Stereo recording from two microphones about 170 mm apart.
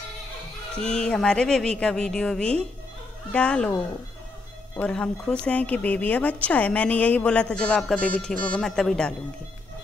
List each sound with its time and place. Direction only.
0.7 s a woman's voice: 5° left (ahead or behind)
4.7 s speech: 5° left (ahead or behind)